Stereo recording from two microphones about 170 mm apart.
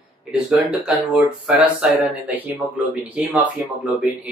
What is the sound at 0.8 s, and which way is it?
Speech, 5° right (ahead or behind).